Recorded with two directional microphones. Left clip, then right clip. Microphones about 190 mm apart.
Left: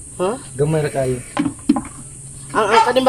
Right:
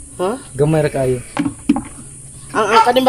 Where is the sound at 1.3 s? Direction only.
15° right (ahead or behind).